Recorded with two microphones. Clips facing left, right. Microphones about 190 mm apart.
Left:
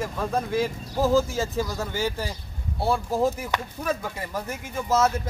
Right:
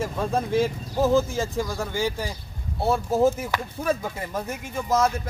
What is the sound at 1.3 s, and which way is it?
Speech, 15° right (ahead or behind).